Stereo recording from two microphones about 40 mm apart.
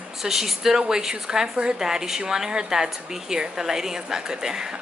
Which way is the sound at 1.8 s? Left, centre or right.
Centre.